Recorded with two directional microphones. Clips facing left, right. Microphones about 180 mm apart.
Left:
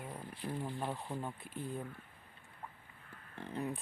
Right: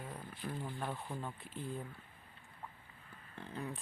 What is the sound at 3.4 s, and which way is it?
Speech, 20° left (ahead or behind).